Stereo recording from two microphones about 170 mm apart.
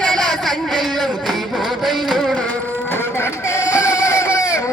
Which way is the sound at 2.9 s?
15° left (ahead or behind).